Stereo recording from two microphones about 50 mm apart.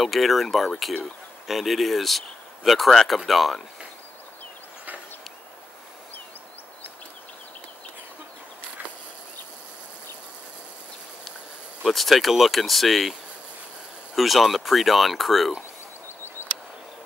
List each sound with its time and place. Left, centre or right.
0.0 s speech: centre
11.8 s speech: centre
14.1 s speech: centre
16.4 s a sound: left